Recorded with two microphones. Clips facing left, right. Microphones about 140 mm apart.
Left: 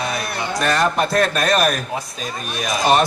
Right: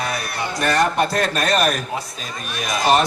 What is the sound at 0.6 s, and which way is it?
Speech, 35° right (ahead or behind).